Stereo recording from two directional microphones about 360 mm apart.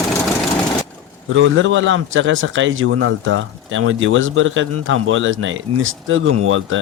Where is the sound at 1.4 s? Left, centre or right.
Right.